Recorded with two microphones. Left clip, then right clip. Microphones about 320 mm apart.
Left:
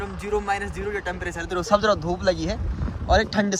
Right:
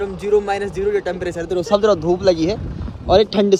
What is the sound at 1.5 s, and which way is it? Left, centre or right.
Speech, right.